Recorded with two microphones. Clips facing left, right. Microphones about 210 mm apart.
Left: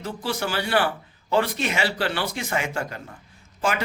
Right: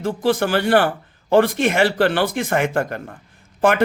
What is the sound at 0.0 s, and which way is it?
Speech, 50° right (ahead or behind).